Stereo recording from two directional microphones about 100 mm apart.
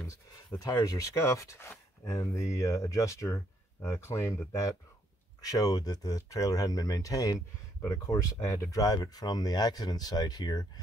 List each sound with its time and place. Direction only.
0.6 s speech: 30° left (ahead or behind)